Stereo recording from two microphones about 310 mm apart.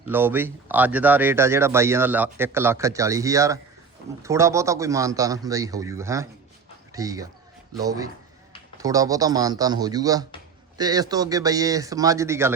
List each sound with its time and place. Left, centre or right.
0.1 s speech: centre